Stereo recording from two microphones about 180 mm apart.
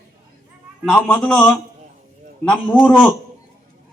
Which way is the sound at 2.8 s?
10° left (ahead or behind).